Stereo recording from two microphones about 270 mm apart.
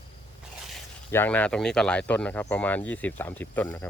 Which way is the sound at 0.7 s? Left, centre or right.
Centre.